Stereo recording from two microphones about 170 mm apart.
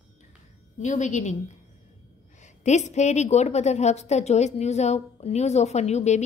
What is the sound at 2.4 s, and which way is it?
A woman's voice, 45° left (ahead or behind).